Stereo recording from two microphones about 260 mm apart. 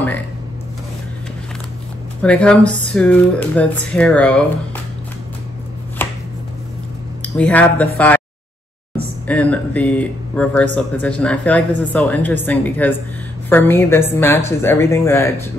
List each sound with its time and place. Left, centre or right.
2.2 s speech: centre
6.0 s chopping: centre
7.3 s speech: centre
9.3 s a woman's voice: centre